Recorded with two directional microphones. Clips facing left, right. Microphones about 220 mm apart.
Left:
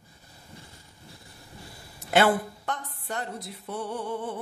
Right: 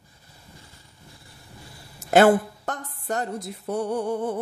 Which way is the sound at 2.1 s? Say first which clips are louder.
Right 6 dB; 45° right (ahead or behind).